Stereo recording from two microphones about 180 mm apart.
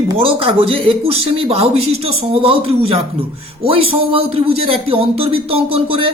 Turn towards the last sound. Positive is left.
turn(degrees=-30)  # may be behind; listen again after turning